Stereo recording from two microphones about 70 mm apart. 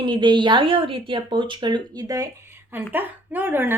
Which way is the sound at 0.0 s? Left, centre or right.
Right.